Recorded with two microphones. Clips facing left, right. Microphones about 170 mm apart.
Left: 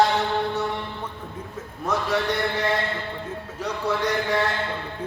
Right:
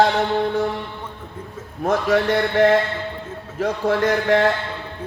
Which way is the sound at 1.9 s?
50° right (ahead or behind).